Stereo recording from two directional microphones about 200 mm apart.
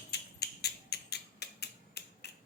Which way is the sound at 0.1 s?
55° left (ahead or behind).